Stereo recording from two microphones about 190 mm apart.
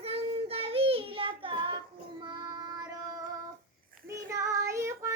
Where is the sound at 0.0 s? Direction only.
30° right (ahead or behind).